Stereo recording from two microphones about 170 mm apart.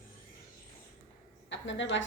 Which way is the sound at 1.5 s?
90° left.